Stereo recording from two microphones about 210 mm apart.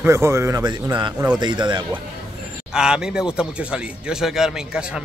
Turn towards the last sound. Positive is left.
turn(degrees=-5)  # may be behind; listen again after turning